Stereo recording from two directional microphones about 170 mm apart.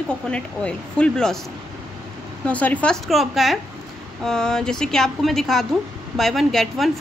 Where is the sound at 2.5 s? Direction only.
10° left (ahead or behind).